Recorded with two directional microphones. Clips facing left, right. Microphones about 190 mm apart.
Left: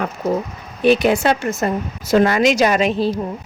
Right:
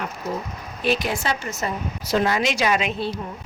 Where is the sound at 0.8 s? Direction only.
60° left (ahead or behind).